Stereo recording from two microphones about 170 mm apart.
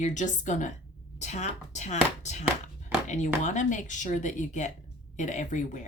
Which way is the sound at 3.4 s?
45° left (ahead or behind).